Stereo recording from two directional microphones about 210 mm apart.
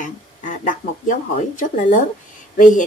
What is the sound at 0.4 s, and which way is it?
Speech, 40° left (ahead or behind).